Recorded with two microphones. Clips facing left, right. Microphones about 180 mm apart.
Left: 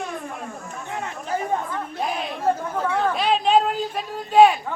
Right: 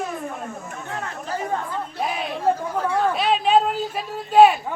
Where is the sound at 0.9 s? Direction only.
20° left (ahead or behind).